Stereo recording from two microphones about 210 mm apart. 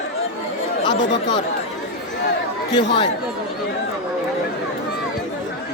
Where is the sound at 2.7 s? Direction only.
20° left (ahead or behind).